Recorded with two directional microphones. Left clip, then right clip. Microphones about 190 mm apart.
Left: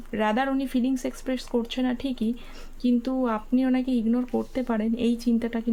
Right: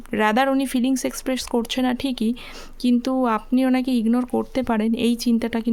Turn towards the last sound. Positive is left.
turn(degrees=-45)  # may be behind; listen again after turning